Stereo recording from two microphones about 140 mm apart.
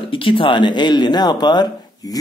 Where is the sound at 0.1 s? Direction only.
40° left (ahead or behind).